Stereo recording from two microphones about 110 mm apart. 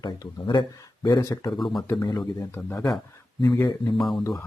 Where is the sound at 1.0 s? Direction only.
30° left (ahead or behind).